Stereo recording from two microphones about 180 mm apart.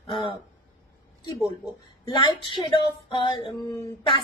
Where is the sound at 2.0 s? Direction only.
25° left (ahead or behind).